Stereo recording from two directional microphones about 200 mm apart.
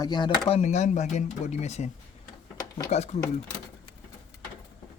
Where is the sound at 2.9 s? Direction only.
35° left (ahead or behind).